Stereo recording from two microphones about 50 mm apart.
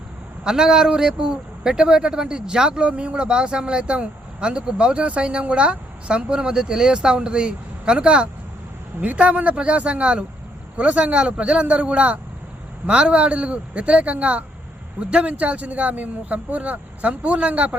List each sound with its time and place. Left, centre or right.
0.4 s speech: centre